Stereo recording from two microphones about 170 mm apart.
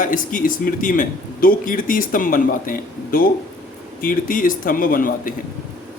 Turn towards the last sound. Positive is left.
turn(degrees=55)  # may be behind; listen again after turning